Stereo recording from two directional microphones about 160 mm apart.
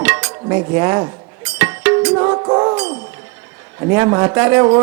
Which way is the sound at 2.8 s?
10° right (ahead or behind).